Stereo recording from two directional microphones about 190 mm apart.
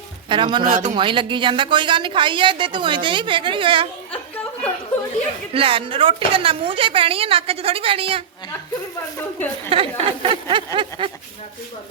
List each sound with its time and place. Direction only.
0.3 s a woman's voice: 25° right (ahead or behind)
0.6 s speech: 40° right (ahead or behind)
0.9 s a woman's voice: 25° right (ahead or behind)
5.5 s a woman's voice: 30° right (ahead or behind)
9.6 s a woman's voice: 30° right (ahead or behind)